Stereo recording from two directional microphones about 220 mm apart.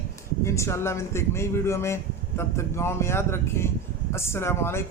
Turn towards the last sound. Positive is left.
turn(degrees=10)  # may be behind; listen again after turning